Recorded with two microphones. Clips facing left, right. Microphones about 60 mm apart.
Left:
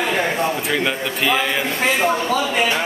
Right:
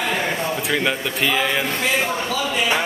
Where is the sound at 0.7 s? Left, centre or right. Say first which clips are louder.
Left 1 dB; centre.